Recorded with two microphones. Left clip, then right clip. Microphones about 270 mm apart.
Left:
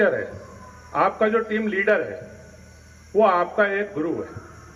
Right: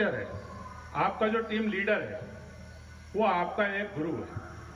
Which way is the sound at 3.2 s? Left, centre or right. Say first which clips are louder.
Left 8 dB; centre.